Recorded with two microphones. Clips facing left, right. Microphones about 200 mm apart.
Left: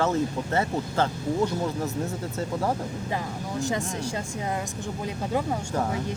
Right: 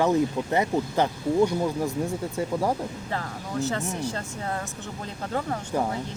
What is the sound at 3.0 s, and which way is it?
Speech, 15° left (ahead or behind).